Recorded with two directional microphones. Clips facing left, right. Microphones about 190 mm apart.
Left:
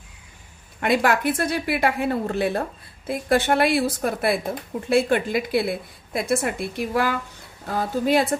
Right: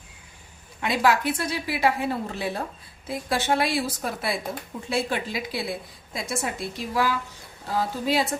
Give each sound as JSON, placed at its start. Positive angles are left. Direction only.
{"t": 0.8, "sound": "a woman's voice", "side_deg": 55}